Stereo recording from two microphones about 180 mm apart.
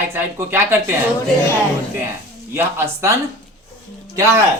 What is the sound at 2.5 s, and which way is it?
Speech, 15° right (ahead or behind).